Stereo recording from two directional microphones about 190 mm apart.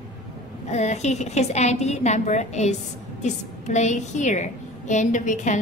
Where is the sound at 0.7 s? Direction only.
35° left (ahead or behind).